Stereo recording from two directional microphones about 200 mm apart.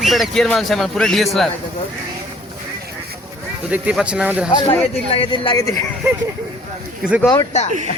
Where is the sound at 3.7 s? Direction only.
5° right (ahead or behind).